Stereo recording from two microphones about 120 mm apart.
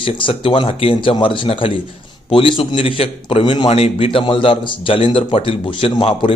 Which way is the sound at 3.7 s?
60° left (ahead or behind).